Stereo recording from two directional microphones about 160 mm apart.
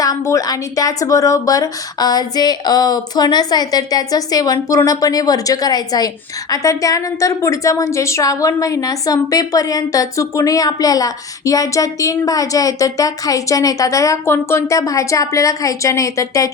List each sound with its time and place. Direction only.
0.0 s a woman's voice: 20° left (ahead or behind)